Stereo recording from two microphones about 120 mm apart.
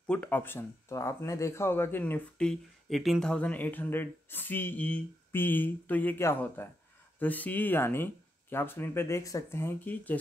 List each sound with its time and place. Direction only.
0.0 s speech: 10° left (ahead or behind)